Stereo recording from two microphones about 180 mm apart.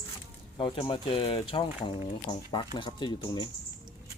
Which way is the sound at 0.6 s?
30° left (ahead or behind).